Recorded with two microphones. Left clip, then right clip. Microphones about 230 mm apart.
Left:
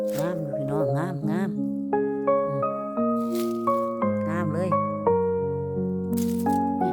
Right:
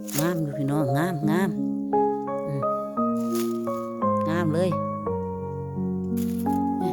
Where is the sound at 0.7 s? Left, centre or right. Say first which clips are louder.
Right 2 dB; centre.